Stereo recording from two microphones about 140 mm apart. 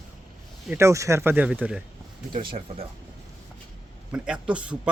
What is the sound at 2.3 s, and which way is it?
Speech, 35° right (ahead or behind).